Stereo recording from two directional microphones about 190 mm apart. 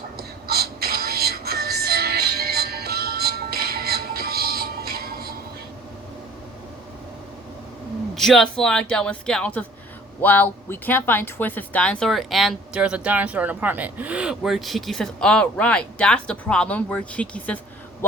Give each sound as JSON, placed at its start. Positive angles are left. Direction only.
{"t": 0.2, "sound": "music", "side_deg": -55}
{"t": 8.1, "sound": "speech", "side_deg": 0}